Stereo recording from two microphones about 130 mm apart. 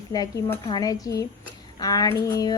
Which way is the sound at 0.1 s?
30° left (ahead or behind).